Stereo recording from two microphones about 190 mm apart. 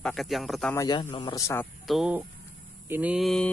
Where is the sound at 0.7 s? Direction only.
20° left (ahead or behind).